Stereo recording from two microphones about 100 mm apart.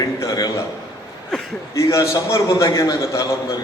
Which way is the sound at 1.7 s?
30° left (ahead or behind).